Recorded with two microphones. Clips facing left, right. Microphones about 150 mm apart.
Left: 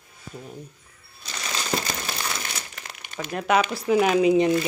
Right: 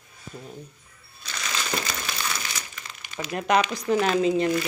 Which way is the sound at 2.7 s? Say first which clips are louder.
Left 1 dB; 60° left (ahead or behind).